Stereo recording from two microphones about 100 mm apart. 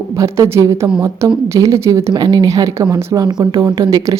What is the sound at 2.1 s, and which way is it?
A woman's voice, 45° right (ahead or behind).